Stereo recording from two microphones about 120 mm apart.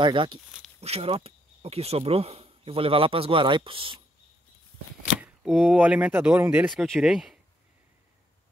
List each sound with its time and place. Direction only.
0.0 s speech: 45° right (ahead or behind)
0.7 s speech: 60° right (ahead or behind)
5.2 s speech: 5° right (ahead or behind)
6.7 s speech: centre (ahead or behind)